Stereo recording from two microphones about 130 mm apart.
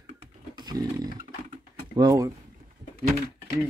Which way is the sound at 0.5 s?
30° right (ahead or behind).